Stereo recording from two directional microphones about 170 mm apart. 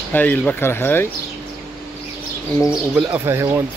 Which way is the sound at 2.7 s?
5° right (ahead or behind).